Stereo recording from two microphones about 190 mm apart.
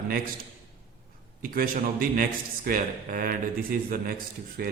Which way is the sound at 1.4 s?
50° right (ahead or behind).